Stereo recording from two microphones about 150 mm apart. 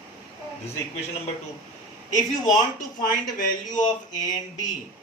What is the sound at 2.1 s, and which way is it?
A man's voice, 55° left (ahead or behind).